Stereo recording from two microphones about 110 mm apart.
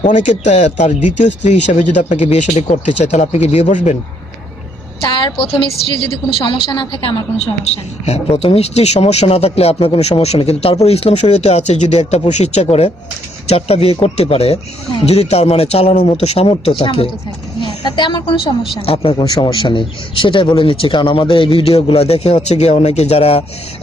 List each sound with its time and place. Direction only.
0.1 s speech: 90° left
5.0 s speech: 45° left (ahead or behind)
7.3 s speech: 70° left (ahead or behind); by 12.6 s 90° left
13.5 s a man's voice: 70° left (ahead or behind)
17.8 s a man's voice: 45° left (ahead or behind)
19.2 s speech: 40° left (ahead or behind); by 22.4 s 65° left (ahead or behind)
22.4 s speech: 80° left; by 23.4 s 65° left (ahead or behind)